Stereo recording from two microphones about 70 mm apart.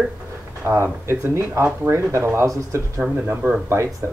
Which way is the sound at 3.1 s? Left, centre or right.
Right.